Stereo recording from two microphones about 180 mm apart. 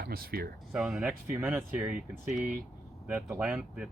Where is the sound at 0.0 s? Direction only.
55° right (ahead or behind).